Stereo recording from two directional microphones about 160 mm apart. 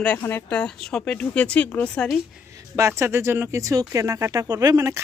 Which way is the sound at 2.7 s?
20° right (ahead or behind).